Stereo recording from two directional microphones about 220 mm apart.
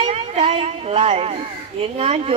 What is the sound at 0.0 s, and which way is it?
Speech, 25° right (ahead or behind).